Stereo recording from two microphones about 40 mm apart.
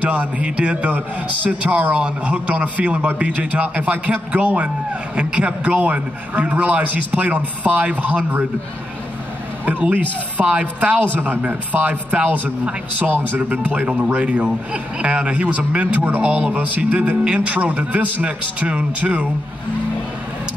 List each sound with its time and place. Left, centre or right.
0.0 s speech: right
0.6 s a man's voice: right
9.7 s speech: right
10.4 s a man's voice: right
11.1 s speech: right
13.0 s speech: right
13.4 s a man's voice: right
15.9 s speech: right
16.2 s speech: right
16.5 s speech: right
17.2 s a man's voice: right